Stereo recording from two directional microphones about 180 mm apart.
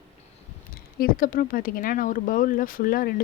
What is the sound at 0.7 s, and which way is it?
Speech, 55° left (ahead or behind).